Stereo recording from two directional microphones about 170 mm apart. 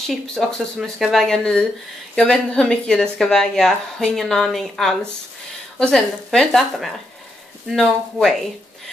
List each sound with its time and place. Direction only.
0.0 s speech: 5° left (ahead or behind)